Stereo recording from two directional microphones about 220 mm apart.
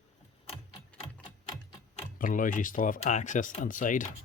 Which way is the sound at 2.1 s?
40° left (ahead or behind).